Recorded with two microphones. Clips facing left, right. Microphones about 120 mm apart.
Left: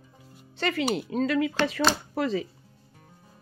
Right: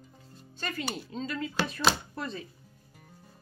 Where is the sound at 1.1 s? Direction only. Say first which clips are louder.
Left 10 dB; 70° left (ahead or behind).